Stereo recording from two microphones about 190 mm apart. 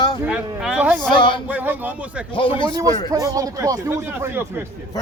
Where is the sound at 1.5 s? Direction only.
10° right (ahead or behind).